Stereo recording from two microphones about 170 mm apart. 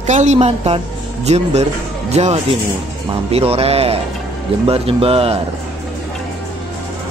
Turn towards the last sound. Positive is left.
turn(degrees=-35)  # may be behind; listen again after turning